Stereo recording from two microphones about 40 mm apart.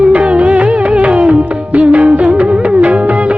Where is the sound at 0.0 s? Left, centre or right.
Right.